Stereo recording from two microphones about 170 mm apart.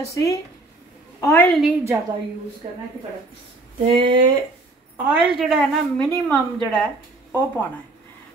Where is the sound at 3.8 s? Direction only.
30° right (ahead or behind).